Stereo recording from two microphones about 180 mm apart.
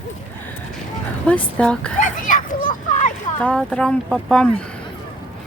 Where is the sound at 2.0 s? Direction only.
50° left (ahead or behind).